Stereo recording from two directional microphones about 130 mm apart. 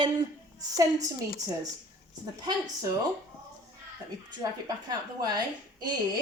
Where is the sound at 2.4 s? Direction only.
30° right (ahead or behind).